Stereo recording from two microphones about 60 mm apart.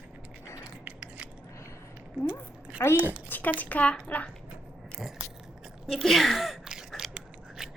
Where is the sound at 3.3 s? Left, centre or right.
Left.